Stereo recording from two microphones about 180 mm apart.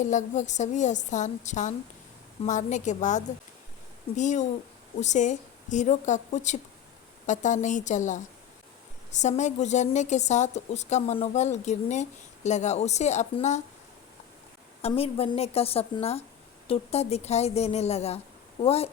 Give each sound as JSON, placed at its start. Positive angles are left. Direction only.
{"t": 0.0, "sound": "a woman's voice", "side_deg": 40}
{"t": 14.8, "sound": "a woman's voice", "side_deg": 35}